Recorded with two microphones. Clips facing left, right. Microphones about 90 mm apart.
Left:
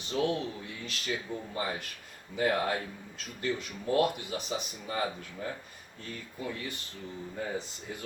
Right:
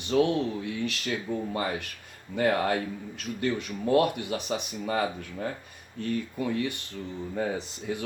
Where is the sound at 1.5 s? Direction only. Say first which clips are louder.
Right 4 dB; 65° right (ahead or behind).